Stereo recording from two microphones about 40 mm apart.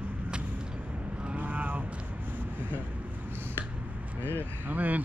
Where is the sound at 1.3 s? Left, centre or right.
Right.